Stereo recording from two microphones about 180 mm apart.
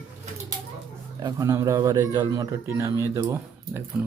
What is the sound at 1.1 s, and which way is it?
A man's voice, 20° right (ahead or behind).